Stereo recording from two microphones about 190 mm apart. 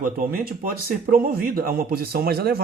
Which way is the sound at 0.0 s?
50° right (ahead or behind).